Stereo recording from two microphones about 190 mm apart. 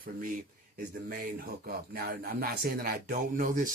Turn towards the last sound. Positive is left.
turn(degrees=-45)  # may be behind; listen again after turning